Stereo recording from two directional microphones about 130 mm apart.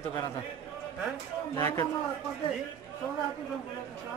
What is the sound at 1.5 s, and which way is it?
Speech, 30° left (ahead or behind).